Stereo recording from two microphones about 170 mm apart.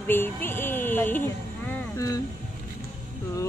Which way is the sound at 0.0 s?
10° left (ahead or behind).